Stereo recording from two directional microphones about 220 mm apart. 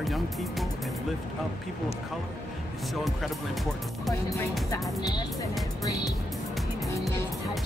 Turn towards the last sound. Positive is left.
turn(degrees=15)  # may be behind; listen again after turning